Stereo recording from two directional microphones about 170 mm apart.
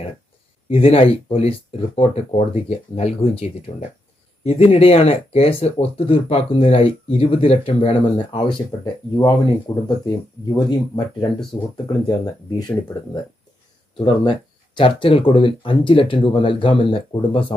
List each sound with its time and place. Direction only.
0.7 s speech: 35° left (ahead or behind)
11.5 s speech: 35° left (ahead or behind)
12.0 s speech: 20° left (ahead or behind)
14.8 s speech: 30° left (ahead or behind)